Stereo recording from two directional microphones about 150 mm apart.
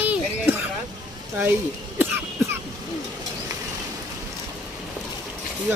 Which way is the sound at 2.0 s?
15° right (ahead or behind).